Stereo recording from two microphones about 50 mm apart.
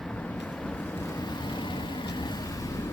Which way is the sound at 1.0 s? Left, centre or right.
Left.